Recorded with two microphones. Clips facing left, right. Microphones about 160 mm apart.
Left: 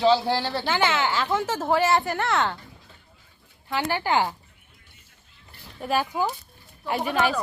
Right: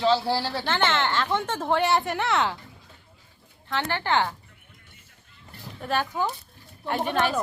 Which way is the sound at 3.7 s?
10° left (ahead or behind).